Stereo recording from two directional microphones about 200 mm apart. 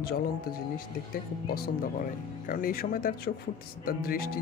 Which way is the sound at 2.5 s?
45° left (ahead or behind).